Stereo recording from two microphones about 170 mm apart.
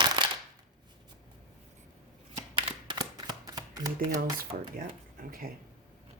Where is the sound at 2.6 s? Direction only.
30° right (ahead or behind).